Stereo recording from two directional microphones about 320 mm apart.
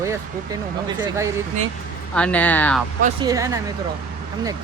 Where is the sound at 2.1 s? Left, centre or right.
Centre.